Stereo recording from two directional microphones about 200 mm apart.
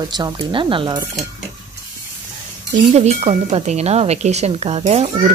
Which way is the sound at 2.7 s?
35° right (ahead or behind).